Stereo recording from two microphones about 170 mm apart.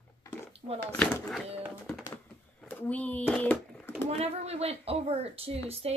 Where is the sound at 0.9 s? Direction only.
5° left (ahead or behind).